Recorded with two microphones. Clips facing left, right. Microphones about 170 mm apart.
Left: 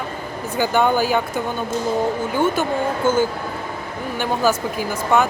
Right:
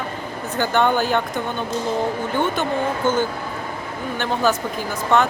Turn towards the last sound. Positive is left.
turn(degrees=10)  # may be behind; listen again after turning